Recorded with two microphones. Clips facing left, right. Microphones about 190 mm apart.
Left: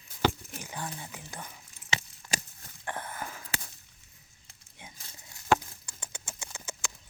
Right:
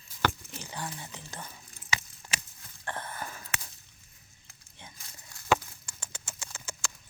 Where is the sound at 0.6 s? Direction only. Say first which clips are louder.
Even; 15° left (ahead or behind).